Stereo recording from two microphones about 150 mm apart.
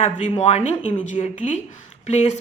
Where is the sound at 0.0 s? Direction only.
50° left (ahead or behind).